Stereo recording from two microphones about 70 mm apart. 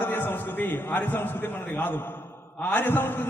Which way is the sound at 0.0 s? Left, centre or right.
Left.